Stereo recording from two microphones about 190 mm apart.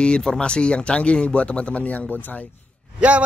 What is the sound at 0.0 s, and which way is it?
Speech, 5° left (ahead or behind).